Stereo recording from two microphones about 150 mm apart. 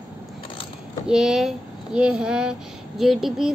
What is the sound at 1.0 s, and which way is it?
A woman's voice, 5° right (ahead or behind).